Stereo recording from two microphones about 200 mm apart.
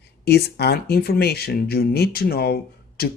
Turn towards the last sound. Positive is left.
turn(degrees=50)  # may be behind; listen again after turning